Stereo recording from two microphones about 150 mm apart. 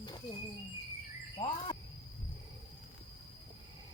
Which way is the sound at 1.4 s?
35° left (ahead or behind).